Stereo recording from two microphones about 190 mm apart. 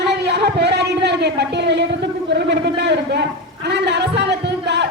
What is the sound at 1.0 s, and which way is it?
A woman's voice, 60° right (ahead or behind).